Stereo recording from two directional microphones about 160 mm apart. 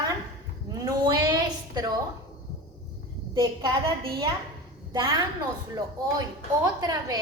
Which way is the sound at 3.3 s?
25° right (ahead or behind).